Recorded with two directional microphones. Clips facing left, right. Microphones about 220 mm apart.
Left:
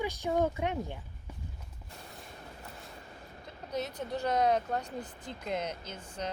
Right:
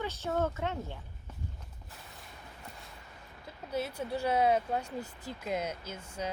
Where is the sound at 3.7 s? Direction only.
10° right (ahead or behind).